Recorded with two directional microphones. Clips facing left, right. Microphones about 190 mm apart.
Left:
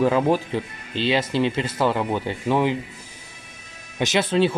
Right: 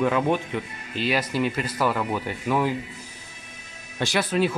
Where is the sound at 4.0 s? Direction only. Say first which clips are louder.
Left 3 dB; 20° left (ahead or behind).